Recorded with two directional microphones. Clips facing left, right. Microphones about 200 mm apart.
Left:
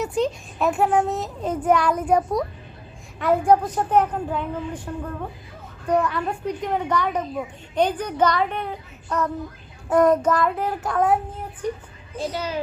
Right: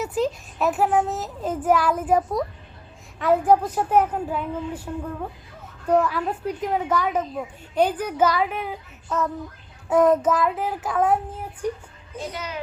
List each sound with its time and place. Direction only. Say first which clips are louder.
0.0 s a child's voice: left 1 dB; 5° right (ahead or behind)
5.9 s a woman's voice: right 1 dB; 5° right (ahead or behind)
12.1 s speech: left 5 dB; 30° left (ahead or behind)